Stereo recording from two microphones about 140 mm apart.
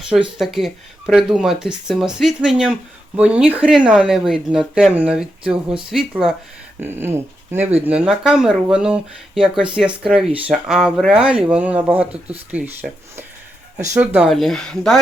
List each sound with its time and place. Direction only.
0.1 s speech: 5° right (ahead or behind)
6.7 s speech: 15° right (ahead or behind)
14.2 s speech: centre (ahead or behind)